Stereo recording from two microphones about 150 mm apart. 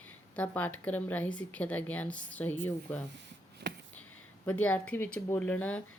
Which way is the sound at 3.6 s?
90° right.